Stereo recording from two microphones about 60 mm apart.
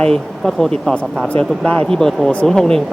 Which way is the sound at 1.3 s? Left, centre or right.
Left.